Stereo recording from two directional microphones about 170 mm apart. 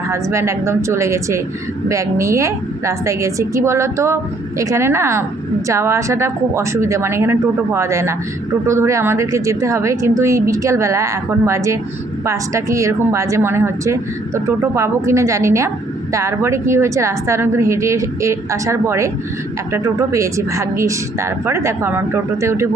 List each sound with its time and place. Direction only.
0.1 s speech: 15° right (ahead or behind)